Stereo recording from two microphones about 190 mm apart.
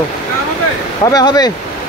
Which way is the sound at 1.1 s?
20° left (ahead or behind).